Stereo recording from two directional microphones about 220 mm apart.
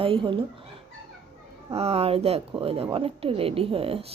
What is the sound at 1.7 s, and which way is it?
A woman's voice, 25° right (ahead or behind).